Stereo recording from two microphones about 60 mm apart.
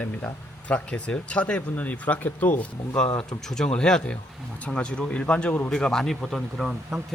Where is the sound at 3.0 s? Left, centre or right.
Centre.